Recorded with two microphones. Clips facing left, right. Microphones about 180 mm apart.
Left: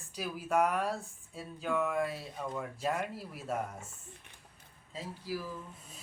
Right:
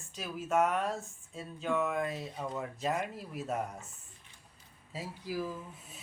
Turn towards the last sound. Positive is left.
turn(degrees=-10)  # may be behind; listen again after turning